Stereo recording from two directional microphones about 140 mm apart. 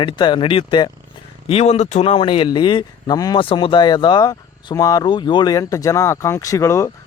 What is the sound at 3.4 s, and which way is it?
Speech, 40° left (ahead or behind).